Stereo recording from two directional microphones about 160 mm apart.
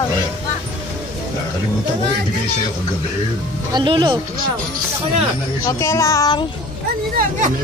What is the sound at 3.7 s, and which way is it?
Speech, 30° right (ahead or behind).